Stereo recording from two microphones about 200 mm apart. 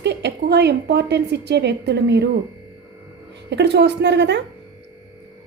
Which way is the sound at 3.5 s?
60° right (ahead or behind).